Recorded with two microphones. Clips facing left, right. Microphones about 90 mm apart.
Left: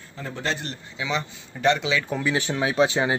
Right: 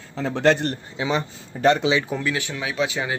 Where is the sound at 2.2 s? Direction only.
25° left (ahead or behind).